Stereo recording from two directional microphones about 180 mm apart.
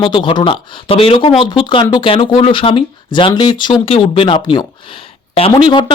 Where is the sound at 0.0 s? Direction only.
25° left (ahead or behind).